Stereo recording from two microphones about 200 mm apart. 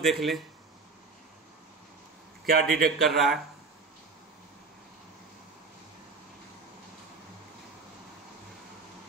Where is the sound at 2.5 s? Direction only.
50° right (ahead or behind).